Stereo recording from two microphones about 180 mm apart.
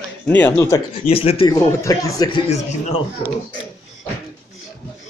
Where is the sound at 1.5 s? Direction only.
20° left (ahead or behind).